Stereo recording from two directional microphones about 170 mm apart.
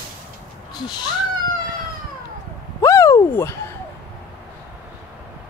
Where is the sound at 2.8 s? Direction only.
15° left (ahead or behind).